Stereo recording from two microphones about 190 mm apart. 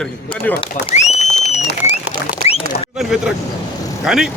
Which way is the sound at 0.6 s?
35° left (ahead or behind).